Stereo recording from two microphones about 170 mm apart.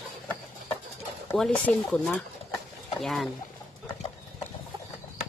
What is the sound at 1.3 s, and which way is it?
Speech, 5° left (ahead or behind).